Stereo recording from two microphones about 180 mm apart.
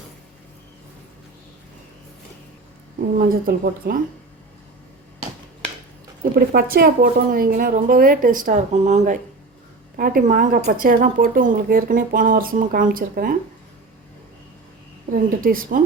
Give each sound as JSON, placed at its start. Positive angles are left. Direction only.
{"t": 3.2, "sound": "speech", "side_deg": -50}
{"t": 6.5, "sound": "speech", "side_deg": -55}
{"t": 15.1, "sound": "speech", "side_deg": -50}